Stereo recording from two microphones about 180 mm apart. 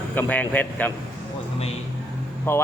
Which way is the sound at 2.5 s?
10° left (ahead or behind).